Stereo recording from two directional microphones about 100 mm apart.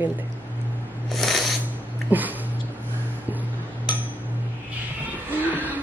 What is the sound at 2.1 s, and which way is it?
Speech, 20° right (ahead or behind).